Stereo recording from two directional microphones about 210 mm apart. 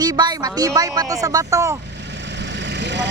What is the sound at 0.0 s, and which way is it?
Speech, 20° right (ahead or behind).